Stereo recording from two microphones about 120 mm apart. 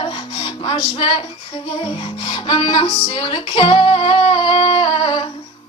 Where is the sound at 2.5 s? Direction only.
45° left (ahead or behind).